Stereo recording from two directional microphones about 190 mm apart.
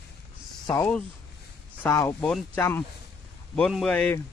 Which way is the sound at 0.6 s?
20° left (ahead or behind).